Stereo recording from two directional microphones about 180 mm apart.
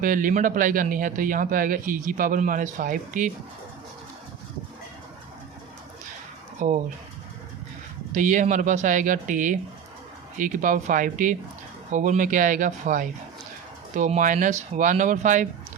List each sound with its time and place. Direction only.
0.0 s speech: 50° right (ahead or behind)
6.6 s speech: 45° right (ahead or behind)
8.1 s speech: 45° right (ahead or behind)